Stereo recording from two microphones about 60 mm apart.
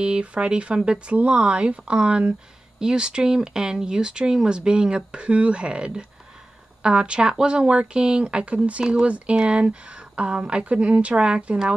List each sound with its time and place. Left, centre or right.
0.0 s speech: centre